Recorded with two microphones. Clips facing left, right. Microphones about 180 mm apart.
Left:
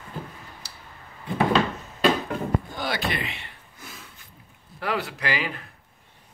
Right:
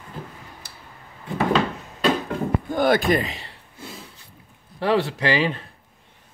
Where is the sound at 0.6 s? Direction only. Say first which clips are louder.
Right 1 dB; 50° right (ahead or behind).